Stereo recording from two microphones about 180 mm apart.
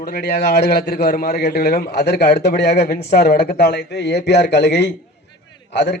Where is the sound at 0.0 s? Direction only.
60° left (ahead or behind).